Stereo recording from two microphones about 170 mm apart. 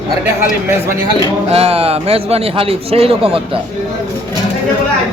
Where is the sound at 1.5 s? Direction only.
35° right (ahead or behind).